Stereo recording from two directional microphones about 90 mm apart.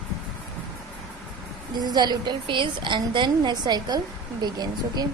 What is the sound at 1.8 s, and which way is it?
A woman's voice, 50° right (ahead or behind).